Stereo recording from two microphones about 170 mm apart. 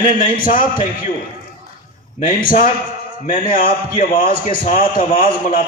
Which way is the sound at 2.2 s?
55° left (ahead or behind).